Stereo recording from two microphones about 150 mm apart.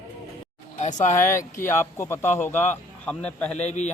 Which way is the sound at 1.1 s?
20° left (ahead or behind).